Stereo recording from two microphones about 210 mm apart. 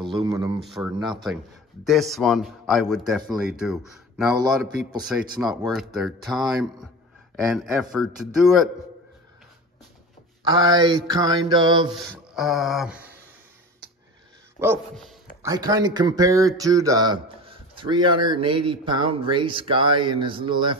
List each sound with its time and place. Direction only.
0.2 s speech: 20° right (ahead or behind)
0.6 s speech: centre (ahead or behind)
10.4 s speech: 20° right (ahead or behind)
11.9 s speech: centre (ahead or behind)
14.6 s speech: 10° right (ahead or behind)